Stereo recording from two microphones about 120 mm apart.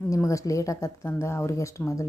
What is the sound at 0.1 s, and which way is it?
Speech, 25° left (ahead or behind).